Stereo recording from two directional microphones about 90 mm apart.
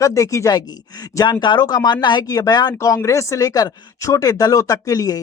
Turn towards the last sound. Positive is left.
turn(degrees=40)  # may be behind; listen again after turning